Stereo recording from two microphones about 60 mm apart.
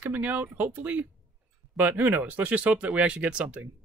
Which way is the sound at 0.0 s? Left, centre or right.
Right.